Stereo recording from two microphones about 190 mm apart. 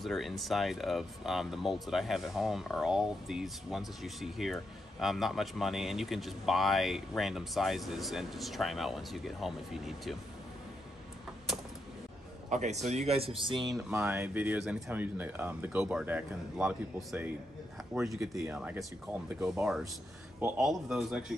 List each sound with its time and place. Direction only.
0.0 s speech: centre (ahead or behind)
12.4 s a man's voice: 40° right (ahead or behind)
13.8 s speech: 10° right (ahead or behind)
18.3 s speech: 10° right (ahead or behind)